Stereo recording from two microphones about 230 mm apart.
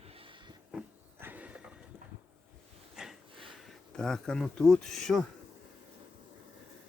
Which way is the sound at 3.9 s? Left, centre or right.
Centre.